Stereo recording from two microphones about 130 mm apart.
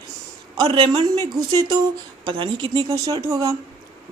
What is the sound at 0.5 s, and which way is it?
A woman's voice, 40° right (ahead or behind).